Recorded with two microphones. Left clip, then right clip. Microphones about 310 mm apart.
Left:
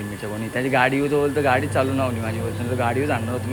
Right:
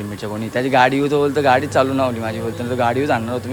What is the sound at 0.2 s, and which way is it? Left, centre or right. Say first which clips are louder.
Speech: right 4 dB; centre.